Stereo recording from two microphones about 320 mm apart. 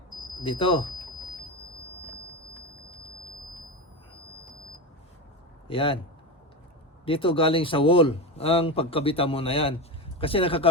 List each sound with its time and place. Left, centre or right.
0.3 s speech: centre
5.6 s a man's voice: centre
7.0 s a man's voice: centre